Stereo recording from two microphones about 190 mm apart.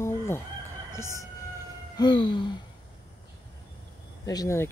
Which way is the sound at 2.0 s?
25° left (ahead or behind).